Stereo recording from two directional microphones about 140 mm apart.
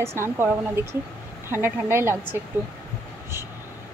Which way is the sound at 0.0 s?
20° right (ahead or behind).